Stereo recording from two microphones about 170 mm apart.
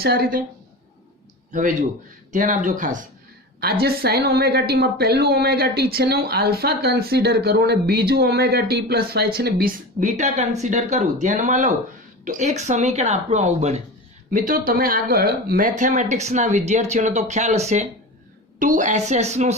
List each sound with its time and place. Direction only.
0.0 s a woman's voice: 65° right (ahead or behind)
2.3 s speech: 50° right (ahead or behind)
3.6 s a woman's voice: 65° right (ahead or behind); by 13.8 s 40° right (ahead or behind)
14.3 s speech: 55° right (ahead or behind)